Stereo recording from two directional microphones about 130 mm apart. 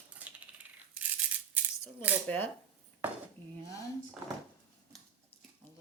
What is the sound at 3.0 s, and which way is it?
Speech, 15° right (ahead or behind).